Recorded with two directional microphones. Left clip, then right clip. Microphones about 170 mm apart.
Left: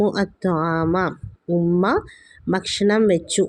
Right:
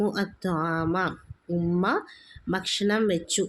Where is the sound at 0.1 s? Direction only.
25° left (ahead or behind).